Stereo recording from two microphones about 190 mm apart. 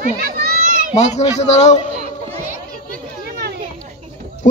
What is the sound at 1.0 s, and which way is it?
Speech, 35° left (ahead or behind).